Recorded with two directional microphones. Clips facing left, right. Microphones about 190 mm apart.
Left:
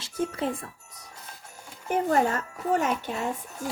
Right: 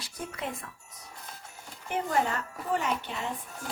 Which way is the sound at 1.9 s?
45° left (ahead or behind).